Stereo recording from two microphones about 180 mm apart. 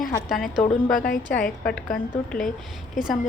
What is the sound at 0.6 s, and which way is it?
Speech, 50° left (ahead or behind).